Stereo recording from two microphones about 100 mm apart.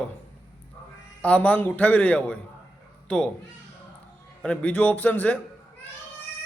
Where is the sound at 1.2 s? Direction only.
15° left (ahead or behind).